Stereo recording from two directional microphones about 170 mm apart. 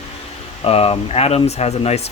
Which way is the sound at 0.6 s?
35° left (ahead or behind).